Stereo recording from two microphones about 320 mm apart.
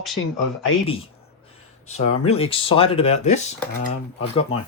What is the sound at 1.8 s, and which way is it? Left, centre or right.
Speech, left.